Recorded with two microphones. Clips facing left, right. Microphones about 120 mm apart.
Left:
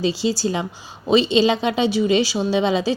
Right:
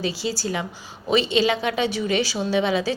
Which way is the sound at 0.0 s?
20° left (ahead or behind).